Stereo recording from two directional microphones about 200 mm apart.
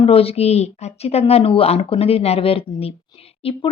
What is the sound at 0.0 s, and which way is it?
Speech, 30° left (ahead or behind).